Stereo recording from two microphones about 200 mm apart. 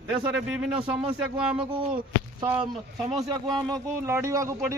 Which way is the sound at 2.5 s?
30° right (ahead or behind).